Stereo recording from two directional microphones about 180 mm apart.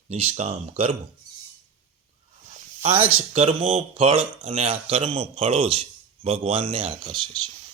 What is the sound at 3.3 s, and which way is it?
Speech, 40° right (ahead or behind).